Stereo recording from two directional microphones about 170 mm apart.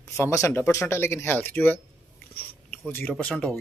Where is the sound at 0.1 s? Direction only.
15° left (ahead or behind).